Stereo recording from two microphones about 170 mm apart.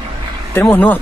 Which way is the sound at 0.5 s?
10° left (ahead or behind).